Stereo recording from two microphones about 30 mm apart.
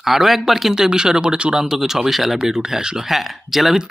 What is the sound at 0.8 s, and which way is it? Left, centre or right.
Speech, right.